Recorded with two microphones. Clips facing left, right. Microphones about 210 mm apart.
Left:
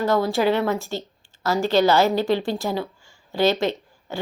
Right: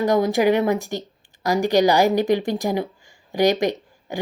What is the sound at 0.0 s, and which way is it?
A woman's voice, 15° right (ahead or behind).